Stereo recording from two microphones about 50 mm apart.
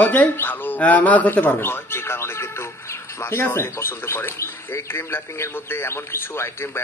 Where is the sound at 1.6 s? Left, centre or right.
Left.